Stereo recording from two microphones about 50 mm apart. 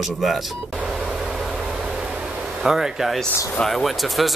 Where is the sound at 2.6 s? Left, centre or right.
Centre.